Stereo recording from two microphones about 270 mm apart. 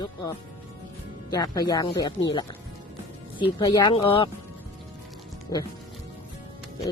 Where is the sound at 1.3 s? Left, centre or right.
Centre.